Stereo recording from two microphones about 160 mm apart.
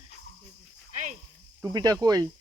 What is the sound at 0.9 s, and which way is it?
Speech, 50° right (ahead or behind).